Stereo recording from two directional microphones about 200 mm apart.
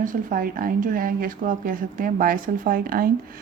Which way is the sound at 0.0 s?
40° right (ahead or behind).